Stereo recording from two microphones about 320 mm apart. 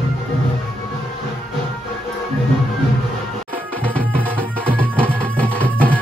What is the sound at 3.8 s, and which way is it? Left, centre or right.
Music, centre.